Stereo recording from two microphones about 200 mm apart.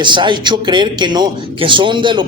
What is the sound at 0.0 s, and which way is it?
Speech, 25° right (ahead or behind).